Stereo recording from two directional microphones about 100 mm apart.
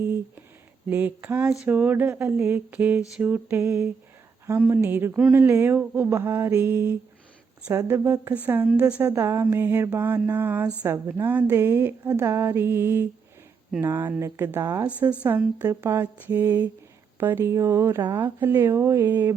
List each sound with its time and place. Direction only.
0.9 s speech: 15° right (ahead or behind)
7.9 s speech: 20° right (ahead or behind)